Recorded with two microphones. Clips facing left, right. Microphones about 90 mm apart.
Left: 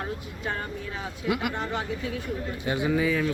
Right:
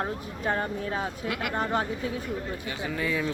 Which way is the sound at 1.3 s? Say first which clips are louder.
Left 9 dB; 5° left (ahead or behind).